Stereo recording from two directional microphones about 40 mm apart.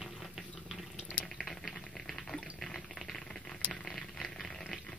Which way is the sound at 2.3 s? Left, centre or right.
Centre.